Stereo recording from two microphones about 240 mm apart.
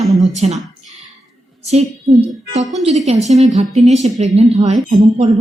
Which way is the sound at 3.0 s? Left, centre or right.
Right.